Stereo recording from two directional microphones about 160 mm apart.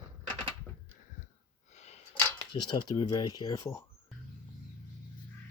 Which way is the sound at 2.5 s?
30° left (ahead or behind).